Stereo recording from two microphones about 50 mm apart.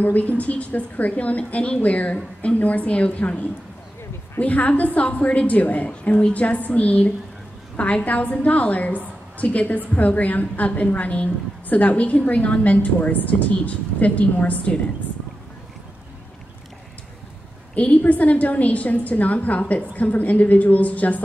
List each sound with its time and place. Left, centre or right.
0.0 s a woman's voice: left
17.7 s a woman's voice: left